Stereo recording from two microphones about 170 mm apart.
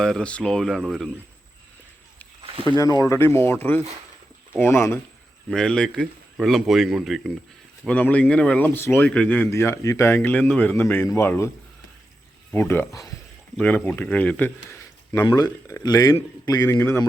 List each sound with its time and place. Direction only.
0.0 s speech: 5° left (ahead or behind)
2.7 s speech: 20° left (ahead or behind)
5.5 s speech: 5° left (ahead or behind)
15.3 s speech: 25° left (ahead or behind)